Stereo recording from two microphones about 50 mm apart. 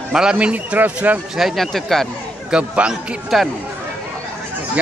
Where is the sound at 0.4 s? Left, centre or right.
Right.